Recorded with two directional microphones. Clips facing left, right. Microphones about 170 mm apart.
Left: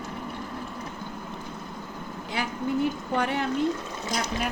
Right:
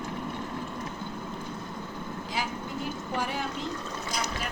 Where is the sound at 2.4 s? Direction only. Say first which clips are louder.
Left 8 dB; 65° left (ahead or behind).